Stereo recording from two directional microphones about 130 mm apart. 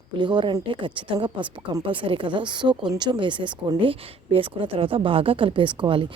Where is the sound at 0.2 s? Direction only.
35° right (ahead or behind).